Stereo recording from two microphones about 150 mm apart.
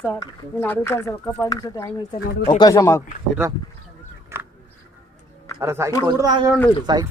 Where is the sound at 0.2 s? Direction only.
20° left (ahead or behind).